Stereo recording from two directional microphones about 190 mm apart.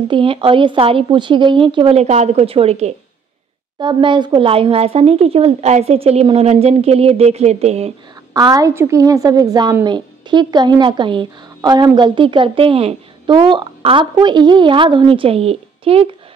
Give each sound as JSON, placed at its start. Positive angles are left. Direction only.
{"t": 0.1, "sound": "a woman's voice", "side_deg": -25}
{"t": 8.3, "sound": "a woman's voice", "side_deg": -20}